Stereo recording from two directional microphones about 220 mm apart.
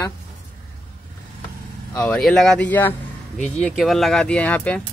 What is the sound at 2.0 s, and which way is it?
A man's voice, 5° left (ahead or behind).